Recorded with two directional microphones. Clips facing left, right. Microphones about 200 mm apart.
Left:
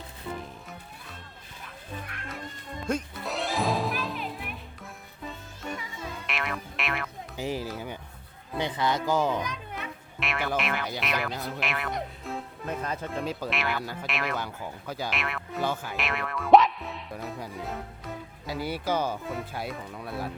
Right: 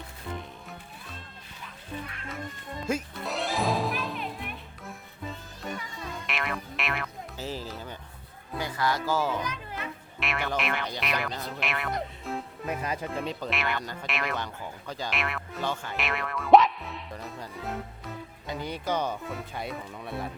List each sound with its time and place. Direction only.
2.8 s music: 5° right (ahead or behind)
6.2 s music: centre (ahead or behind)
7.3 s run: 15° left (ahead or behind)
8.5 s speech: 20° left (ahead or behind)
9.4 s a child's voice: centre (ahead or behind)
13.2 s speech: centre (ahead or behind)